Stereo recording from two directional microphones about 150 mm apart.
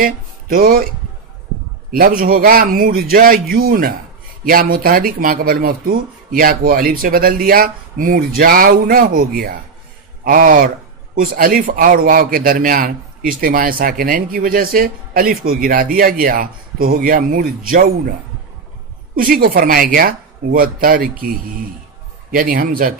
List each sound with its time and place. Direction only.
0.0 s speech: 75° right (ahead or behind)
1.9 s a man's voice: 75° right (ahead or behind)
19.1 s a man's voice: 75° right (ahead or behind)